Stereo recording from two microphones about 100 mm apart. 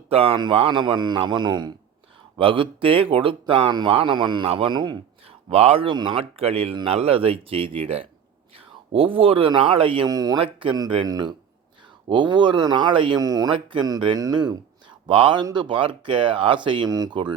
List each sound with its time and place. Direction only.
0.1 s speech: 75° right (ahead or behind)
0.5 s a man's voice: 60° right (ahead or behind)
2.4 s speech: 60° right (ahead or behind)
4.4 s speech: 70° right (ahead or behind)
4.7 s a man's voice: 50° right (ahead or behind)
5.5 s speech: 75° right (ahead or behind)
5.9 s speech: 55° right (ahead or behind)
10.1 s speech: 40° right (ahead or behind)
10.3 s speech: 60° right (ahead or behind)
10.8 s a man's voice: 50° right (ahead or behind)
13.1 s speech: 40° right (ahead or behind)
13.5 s speech: 55° right (ahead or behind)
14.2 s speech: 45° right (ahead or behind)
16.9 s speech: 40° right (ahead or behind)